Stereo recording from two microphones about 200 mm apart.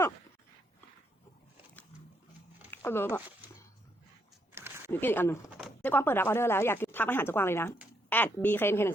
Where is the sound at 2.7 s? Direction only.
10° left (ahead or behind).